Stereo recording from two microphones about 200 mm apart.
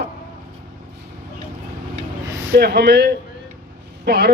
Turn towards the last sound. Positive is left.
turn(degrees=-55)  # may be behind; listen again after turning